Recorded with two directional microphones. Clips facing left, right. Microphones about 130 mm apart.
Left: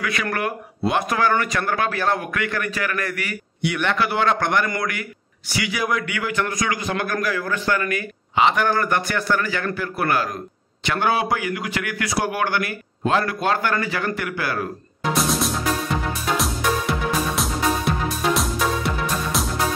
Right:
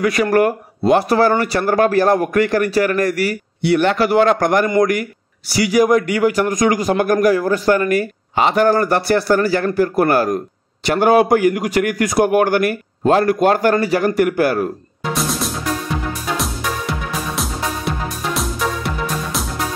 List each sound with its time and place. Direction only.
0.0 s a man's voice: 40° right (ahead or behind)
15.1 s music: centre (ahead or behind)
17.4 s music: centre (ahead or behind)